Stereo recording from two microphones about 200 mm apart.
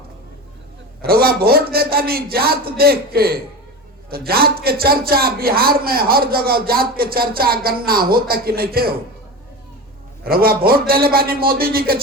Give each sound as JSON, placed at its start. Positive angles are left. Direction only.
{"t": 1.0, "sound": "a man's voice", "side_deg": -50}
{"t": 10.2, "sound": "a man's voice", "side_deg": -50}